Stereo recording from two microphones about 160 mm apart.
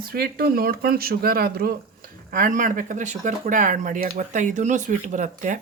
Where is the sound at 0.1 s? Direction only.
70° right (ahead or behind).